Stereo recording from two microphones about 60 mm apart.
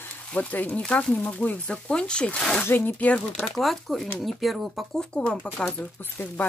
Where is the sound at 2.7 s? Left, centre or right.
Left.